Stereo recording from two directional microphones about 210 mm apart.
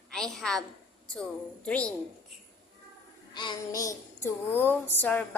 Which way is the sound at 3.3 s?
20° left (ahead or behind).